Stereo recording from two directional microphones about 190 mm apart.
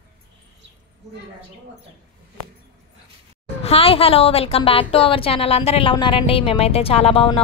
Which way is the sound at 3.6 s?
30° left (ahead or behind).